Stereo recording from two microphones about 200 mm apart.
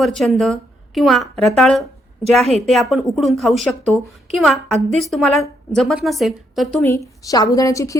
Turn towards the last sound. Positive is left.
turn(degrees=15)  # may be behind; listen again after turning